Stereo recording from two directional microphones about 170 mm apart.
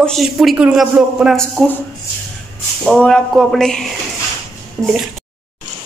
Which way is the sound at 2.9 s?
5° left (ahead or behind).